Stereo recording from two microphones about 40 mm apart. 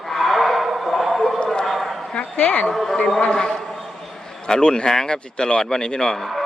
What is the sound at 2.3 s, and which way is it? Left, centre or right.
Speech, left.